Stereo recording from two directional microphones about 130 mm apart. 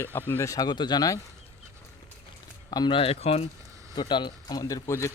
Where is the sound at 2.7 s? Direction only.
35° left (ahead or behind); by 3.4 s 50° left (ahead or behind).